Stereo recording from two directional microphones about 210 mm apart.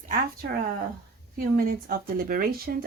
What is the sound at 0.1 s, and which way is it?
A woman's voice, 45° right (ahead or behind).